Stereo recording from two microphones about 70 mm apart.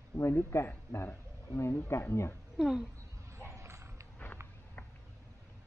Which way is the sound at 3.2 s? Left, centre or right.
Right.